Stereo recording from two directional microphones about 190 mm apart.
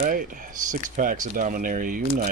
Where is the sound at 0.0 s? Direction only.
50° right (ahead or behind).